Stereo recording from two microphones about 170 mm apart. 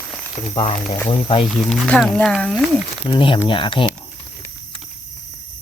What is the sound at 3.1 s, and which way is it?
Speech, 30° left (ahead or behind).